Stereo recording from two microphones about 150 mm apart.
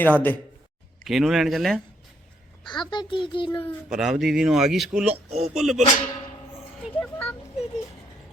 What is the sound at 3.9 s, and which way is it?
Speech, centre (ahead or behind).